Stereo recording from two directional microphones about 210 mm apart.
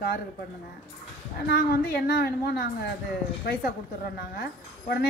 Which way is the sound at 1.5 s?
50° left (ahead or behind).